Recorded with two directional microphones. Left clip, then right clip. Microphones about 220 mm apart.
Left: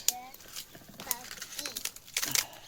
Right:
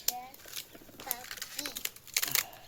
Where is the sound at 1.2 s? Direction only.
15° right (ahead or behind).